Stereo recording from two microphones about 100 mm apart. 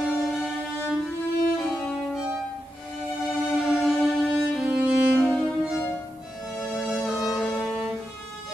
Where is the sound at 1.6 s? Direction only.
5° left (ahead or behind).